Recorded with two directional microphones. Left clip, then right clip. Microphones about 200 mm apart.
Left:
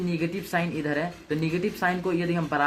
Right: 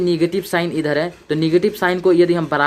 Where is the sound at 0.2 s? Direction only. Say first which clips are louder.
Right 10 dB; 40° right (ahead or behind).